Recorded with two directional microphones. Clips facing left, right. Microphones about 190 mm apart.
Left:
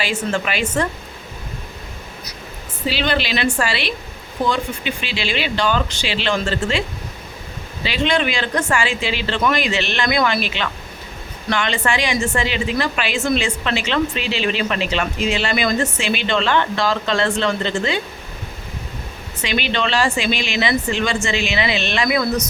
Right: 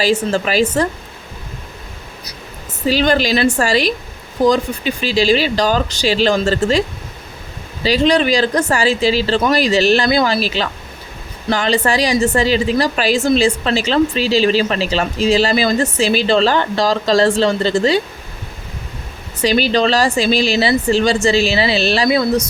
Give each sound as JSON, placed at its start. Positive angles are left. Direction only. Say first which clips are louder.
{"t": 0.0, "sound": "a woman's voice", "louder": "right 6 dB", "side_deg": -35}
{"t": 2.8, "sound": "a woman's voice", "louder": "right 6 dB", "side_deg": -40}
{"t": 7.9, "sound": "a woman's voice", "louder": "right 6 dB", "side_deg": -40}
{"t": 19.4, "sound": "a woman's voice", "louder": "right 7 dB", "side_deg": -40}